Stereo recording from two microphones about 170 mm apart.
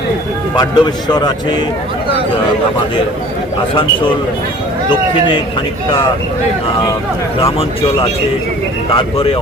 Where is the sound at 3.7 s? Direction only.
30° left (ahead or behind).